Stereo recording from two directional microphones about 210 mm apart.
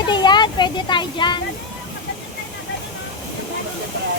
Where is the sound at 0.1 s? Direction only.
20° left (ahead or behind).